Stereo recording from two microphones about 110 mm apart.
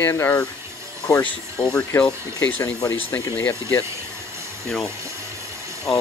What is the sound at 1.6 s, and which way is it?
Speech, 10° left (ahead or behind).